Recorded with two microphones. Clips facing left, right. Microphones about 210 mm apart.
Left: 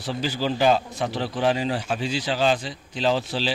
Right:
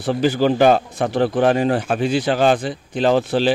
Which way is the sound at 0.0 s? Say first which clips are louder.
Right 9 dB; 55° right (ahead or behind).